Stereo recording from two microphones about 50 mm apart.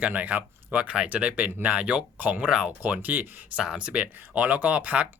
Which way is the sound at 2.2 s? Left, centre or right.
Right.